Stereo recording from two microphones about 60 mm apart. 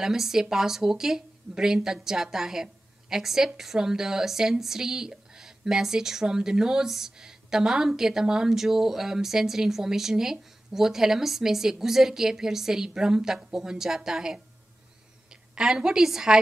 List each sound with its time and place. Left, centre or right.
0.0 s speech: centre
15.5 s speech: centre